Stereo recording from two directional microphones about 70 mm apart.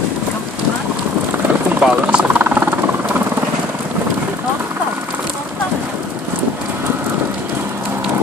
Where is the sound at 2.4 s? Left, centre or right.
Right.